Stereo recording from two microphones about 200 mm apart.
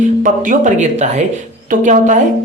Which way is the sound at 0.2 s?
40° right (ahead or behind).